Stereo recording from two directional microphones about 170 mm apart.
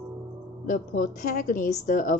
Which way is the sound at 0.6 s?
50° left (ahead or behind).